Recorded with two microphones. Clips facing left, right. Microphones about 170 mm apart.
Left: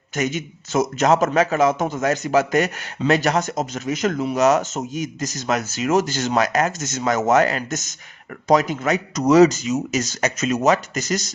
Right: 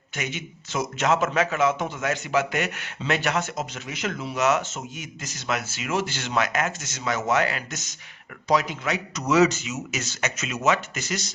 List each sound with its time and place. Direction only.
0.2 s a man's voice: 40° left (ahead or behind)